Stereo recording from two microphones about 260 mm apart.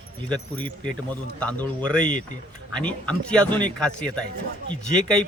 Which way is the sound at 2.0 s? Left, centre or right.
Left.